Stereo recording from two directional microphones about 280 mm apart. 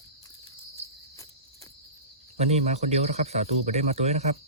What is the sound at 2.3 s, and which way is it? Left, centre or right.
Speech, right.